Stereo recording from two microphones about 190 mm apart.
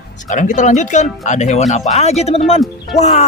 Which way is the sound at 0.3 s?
40° left (ahead or behind).